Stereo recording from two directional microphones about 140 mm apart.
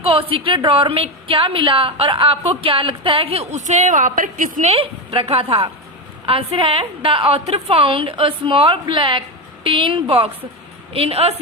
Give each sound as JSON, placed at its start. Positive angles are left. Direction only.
{"t": 0.0, "sound": "a woman's voice", "side_deg": -40}
{"t": 4.7, "sound": "a woman's voice", "side_deg": -45}